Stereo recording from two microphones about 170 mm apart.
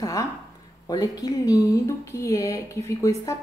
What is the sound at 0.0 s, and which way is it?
A woman's voice, 20° left (ahead or behind).